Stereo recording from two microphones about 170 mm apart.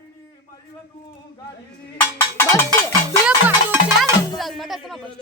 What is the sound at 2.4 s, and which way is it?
Cowbell, 15° left (ahead or behind).